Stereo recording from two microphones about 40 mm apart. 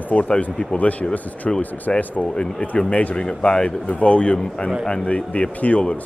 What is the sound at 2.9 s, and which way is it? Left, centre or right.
Speech, left.